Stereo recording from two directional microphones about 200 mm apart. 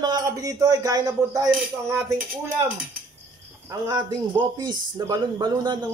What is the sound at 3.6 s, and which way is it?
Speech, 15° right (ahead or behind).